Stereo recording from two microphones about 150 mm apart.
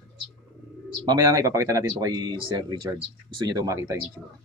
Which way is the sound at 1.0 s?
25° right (ahead or behind).